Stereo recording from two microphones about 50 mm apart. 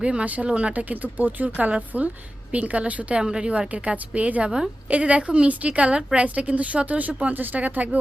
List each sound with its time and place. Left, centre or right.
0.0 s a woman's voice: right
3.2 s a woman's voice: centre
4.4 s a woman's voice: centre
4.9 s a woman's voice: right